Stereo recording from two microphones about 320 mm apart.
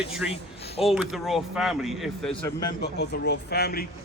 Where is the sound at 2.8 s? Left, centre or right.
Left.